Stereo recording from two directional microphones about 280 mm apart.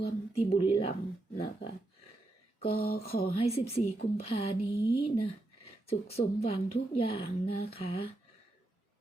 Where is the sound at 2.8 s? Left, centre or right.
Left.